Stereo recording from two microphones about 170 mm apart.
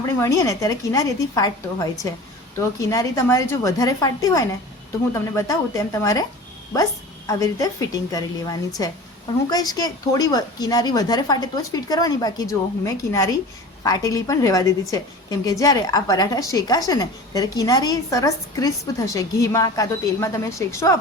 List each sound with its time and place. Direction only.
0.0 s a woman's voice: 20° left (ahead or behind)
7.3 s a woman's voice: 20° left (ahead or behind)